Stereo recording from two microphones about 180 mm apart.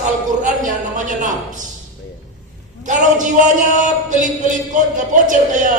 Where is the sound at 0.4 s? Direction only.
45° right (ahead or behind).